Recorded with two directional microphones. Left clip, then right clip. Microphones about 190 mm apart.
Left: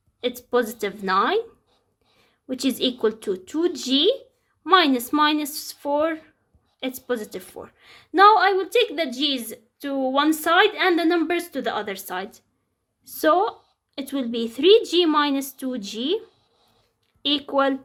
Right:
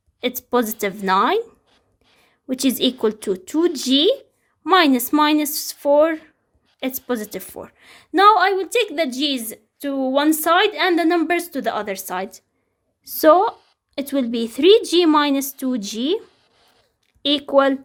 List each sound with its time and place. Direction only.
0.2 s a woman's voice: 45° right (ahead or behind)
16.2 s writing: 25° right (ahead or behind)
17.2 s a woman's voice: 40° right (ahead or behind)